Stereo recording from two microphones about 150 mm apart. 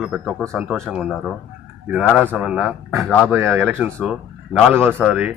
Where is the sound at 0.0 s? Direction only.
Centre (ahead or behind).